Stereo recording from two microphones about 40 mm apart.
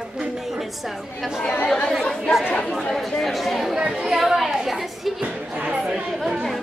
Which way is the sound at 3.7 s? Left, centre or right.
Centre.